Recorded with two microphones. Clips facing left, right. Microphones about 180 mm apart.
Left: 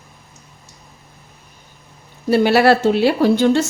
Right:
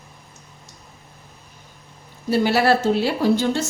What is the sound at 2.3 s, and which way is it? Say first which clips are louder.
A woman's voice: left 5 dB; 65° left (ahead or behind).